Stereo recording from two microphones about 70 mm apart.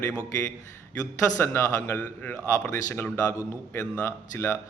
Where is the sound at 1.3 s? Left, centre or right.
Left.